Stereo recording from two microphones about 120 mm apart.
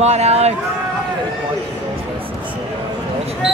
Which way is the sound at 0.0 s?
65° right (ahead or behind).